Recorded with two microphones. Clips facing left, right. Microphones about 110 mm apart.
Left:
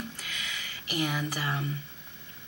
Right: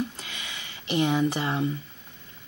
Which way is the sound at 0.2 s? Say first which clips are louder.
Even; 25° right (ahead or behind).